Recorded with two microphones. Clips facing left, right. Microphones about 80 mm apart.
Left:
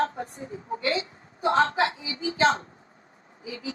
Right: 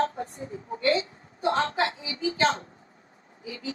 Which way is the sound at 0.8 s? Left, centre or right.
Right.